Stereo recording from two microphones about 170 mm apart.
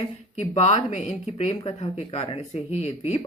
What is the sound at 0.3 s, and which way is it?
Speech, 40° left (ahead or behind).